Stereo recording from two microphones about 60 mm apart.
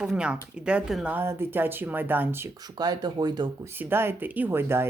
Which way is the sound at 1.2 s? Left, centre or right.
Right.